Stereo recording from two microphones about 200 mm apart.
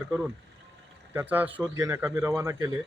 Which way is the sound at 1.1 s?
10° right (ahead or behind).